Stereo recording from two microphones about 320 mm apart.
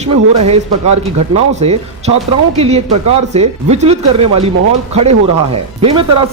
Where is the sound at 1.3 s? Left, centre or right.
Centre.